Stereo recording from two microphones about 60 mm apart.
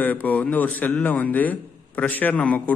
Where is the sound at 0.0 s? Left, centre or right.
Left.